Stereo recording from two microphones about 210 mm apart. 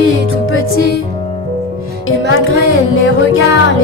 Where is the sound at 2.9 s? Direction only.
70° left (ahead or behind).